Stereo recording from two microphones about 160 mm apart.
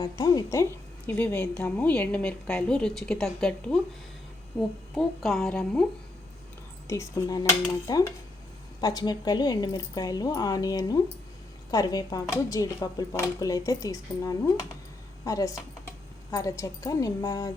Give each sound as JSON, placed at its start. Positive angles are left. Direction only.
{"t": 0.0, "sound": "a woman's voice", "side_deg": 20}
{"t": 4.9, "sound": "a woman's voice", "side_deg": 0}
{"t": 6.8, "sound": "a woman's voice", "side_deg": 20}